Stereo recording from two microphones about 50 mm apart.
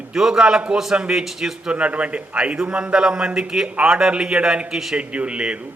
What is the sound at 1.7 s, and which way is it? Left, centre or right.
A man's voice, right.